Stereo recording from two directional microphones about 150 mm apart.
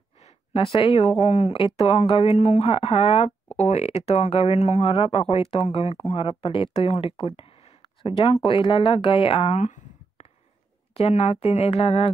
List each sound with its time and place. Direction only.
0.5 s speech: 40° left (ahead or behind)
1.5 s speech: 35° left (ahead or behind)